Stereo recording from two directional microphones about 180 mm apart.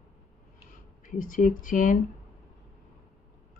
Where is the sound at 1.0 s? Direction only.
50° left (ahead or behind).